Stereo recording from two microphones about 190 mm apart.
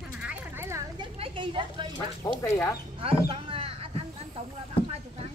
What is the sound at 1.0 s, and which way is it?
Speech, 25° right (ahead or behind).